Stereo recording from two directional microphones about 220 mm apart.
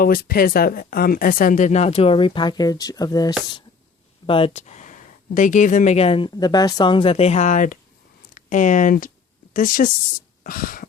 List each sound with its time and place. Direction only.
0.0 s speech: 40° left (ahead or behind)